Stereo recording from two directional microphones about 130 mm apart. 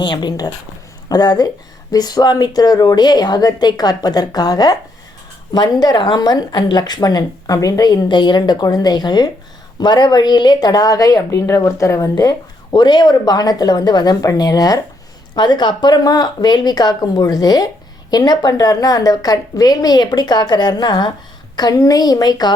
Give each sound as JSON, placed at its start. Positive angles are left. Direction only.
{"t": 0.0, "sound": "a woman's voice", "side_deg": 35}